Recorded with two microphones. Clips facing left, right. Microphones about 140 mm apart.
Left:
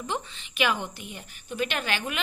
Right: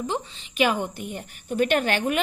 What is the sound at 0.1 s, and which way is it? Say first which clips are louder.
A woman's voice: right 3 dB; 35° right (ahead or behind).